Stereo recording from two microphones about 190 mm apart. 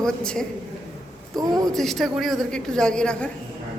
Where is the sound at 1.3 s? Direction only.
20° right (ahead or behind).